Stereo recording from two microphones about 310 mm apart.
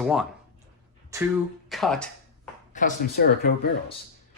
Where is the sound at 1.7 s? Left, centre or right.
Centre.